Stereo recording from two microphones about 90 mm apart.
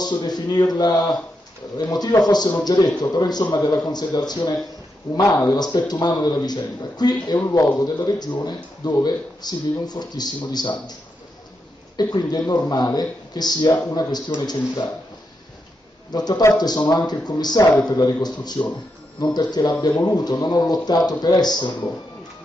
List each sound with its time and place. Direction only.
0.0 s a man's voice: 50° left (ahead or behind)
12.0 s a man's voice: 50° left (ahead or behind)
16.1 s a man's voice: 50° left (ahead or behind)